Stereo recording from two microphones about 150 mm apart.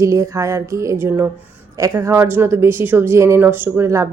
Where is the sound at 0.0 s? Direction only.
20° right (ahead or behind).